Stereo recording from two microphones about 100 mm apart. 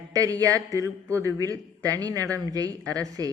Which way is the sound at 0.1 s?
35° right (ahead or behind).